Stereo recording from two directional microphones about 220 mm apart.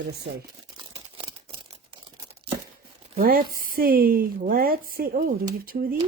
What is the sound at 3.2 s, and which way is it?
A woman's voice, 40° right (ahead or behind).